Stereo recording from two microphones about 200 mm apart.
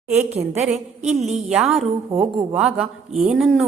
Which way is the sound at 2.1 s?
25° right (ahead or behind).